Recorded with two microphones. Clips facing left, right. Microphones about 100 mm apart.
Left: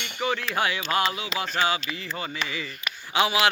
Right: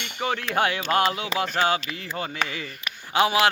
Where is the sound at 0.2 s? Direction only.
50° right (ahead or behind).